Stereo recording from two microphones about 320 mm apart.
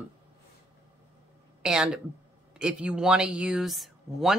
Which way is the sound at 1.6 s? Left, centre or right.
Centre.